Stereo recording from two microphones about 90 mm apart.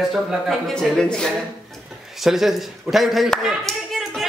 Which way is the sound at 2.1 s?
5° right (ahead or behind).